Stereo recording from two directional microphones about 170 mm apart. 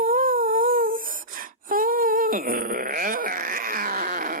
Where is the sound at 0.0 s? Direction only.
55° right (ahead or behind).